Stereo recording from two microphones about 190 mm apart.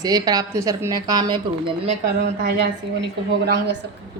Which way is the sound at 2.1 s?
60° right (ahead or behind).